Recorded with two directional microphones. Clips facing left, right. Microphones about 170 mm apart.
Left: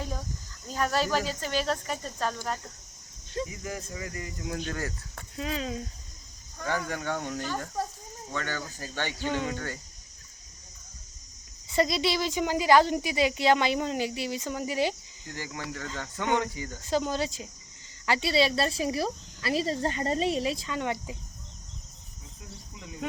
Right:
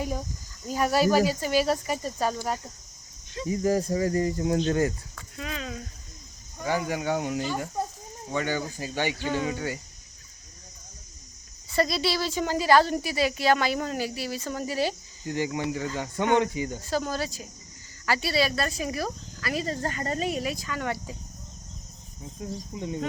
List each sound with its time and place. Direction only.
0.0 s speech: 10° right (ahead or behind)
3.5 s speech: 35° right (ahead or behind)
5.4 s speech: 30° left (ahead or behind)
6.6 s speech: 10° right (ahead or behind)
11.7 s speech: 20° left (ahead or behind)
15.3 s speech: 20° right (ahead or behind)
16.8 s speech: 20° left (ahead or behind)
22.4 s speech: 30° right (ahead or behind)